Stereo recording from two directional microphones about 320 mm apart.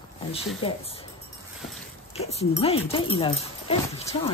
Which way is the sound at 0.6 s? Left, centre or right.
Centre.